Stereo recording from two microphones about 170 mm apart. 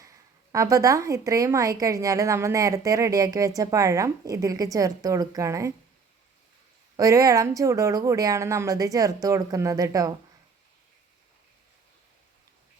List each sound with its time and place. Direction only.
0.0 s a woman's voice: 20° right (ahead or behind)
6.9 s a woman's voice: 20° right (ahead or behind)